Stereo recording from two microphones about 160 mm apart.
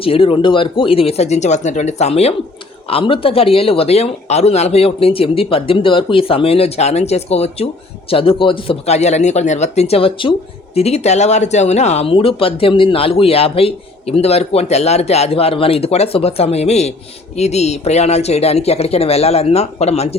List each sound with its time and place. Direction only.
0.0 s speech: 35° left (ahead or behind)